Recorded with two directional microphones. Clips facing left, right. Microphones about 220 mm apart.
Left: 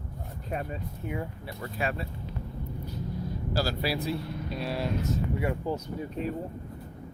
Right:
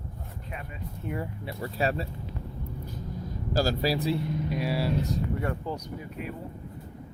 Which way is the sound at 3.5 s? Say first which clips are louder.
Right 4 dB; 40° right (ahead or behind).